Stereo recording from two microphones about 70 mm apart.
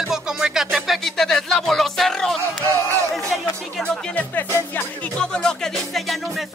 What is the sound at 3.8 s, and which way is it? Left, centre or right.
Music, left.